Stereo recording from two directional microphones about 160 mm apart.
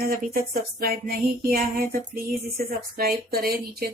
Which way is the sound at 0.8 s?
75° right (ahead or behind).